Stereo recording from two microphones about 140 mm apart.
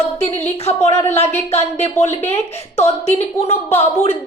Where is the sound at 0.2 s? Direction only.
15° left (ahead or behind).